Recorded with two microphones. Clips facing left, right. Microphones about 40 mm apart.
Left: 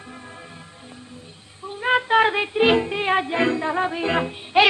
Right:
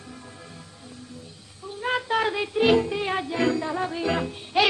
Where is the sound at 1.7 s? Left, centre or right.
Left.